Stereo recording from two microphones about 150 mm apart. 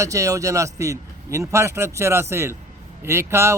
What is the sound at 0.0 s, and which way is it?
A man's voice, 20° right (ahead or behind).